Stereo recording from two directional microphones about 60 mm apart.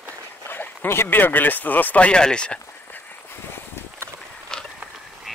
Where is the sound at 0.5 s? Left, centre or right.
Left.